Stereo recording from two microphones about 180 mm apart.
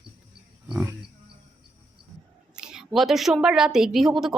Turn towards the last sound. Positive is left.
turn(degrees=0)  # may be behind; listen again after turning